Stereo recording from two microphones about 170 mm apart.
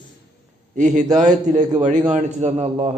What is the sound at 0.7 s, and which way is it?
Speech, 45° right (ahead or behind).